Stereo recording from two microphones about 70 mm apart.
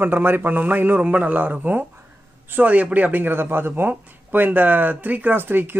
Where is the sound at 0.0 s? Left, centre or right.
Right.